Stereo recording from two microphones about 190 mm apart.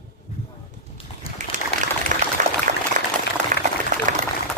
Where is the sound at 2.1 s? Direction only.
40° right (ahead or behind).